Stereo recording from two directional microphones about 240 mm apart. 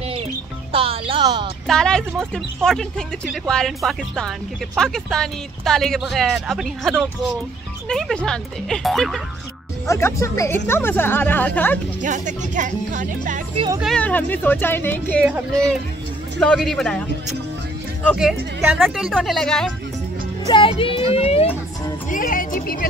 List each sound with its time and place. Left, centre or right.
0.1 s music: right
1.7 s speech: centre
9.8 s speech: centre
12.0 s speech: right
13.7 s speech: centre
16.3 s speech: centre
20.4 s speech: centre; by 22.8 s left